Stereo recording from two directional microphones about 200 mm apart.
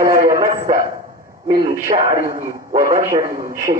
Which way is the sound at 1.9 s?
30° right (ahead or behind).